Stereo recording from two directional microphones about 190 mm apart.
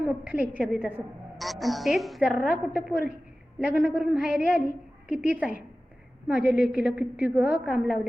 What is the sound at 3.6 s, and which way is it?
A woman's voice, 10° right (ahead or behind).